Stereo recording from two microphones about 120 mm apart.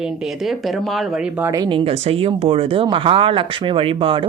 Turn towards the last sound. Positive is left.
turn(degrees=-50)  # may be behind; listen again after turning